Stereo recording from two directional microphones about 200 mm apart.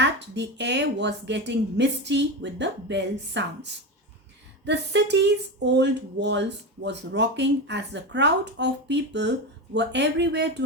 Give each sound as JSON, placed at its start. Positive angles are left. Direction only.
{"t": 0.0, "sound": "speech", "side_deg": -60}